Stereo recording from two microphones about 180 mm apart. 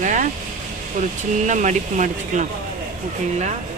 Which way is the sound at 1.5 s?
45° right (ahead or behind).